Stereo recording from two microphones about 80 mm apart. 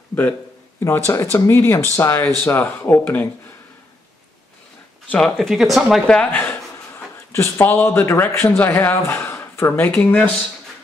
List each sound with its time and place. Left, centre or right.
0.7 s speech: left
1.5 s a man's voice: left
5.1 s speech: centre
6.0 s speech: centre
7.3 s a man's voice: left